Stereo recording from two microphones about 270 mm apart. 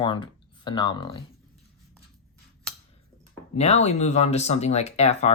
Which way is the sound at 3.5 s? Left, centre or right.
Left.